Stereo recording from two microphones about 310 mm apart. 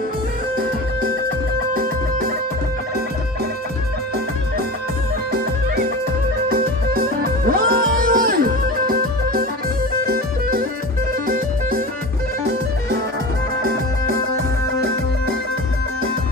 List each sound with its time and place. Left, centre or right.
1.7 s music: right
7.4 s music: right